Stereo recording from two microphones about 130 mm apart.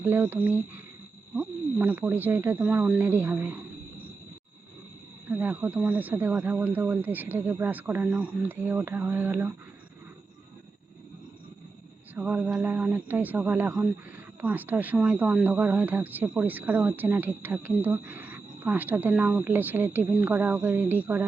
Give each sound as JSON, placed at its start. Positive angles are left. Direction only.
{"t": 0.0, "sound": "speech", "side_deg": -15}
{"t": 5.3, "sound": "speech", "side_deg": -15}
{"t": 12.1, "sound": "speech", "side_deg": -10}